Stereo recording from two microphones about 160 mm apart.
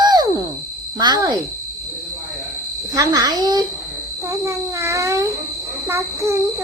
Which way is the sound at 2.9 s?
25° right (ahead or behind).